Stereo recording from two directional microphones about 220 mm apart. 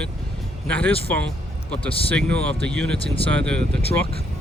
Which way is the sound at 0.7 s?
5° left (ahead or behind).